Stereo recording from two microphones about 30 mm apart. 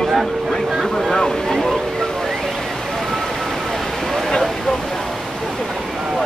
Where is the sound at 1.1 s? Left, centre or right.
Left.